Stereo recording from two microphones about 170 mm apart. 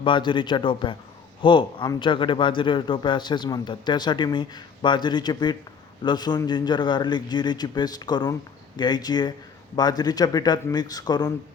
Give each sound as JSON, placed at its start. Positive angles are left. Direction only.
{"t": 0.0, "sound": "a man's voice", "side_deg": 30}